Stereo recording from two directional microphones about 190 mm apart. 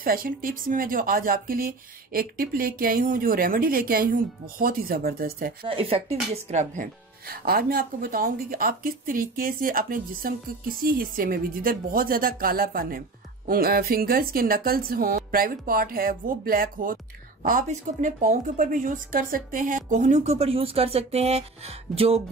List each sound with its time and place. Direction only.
0.0 s speech: 50° right (ahead or behind)
5.7 s a woman's voice: 30° right (ahead or behind)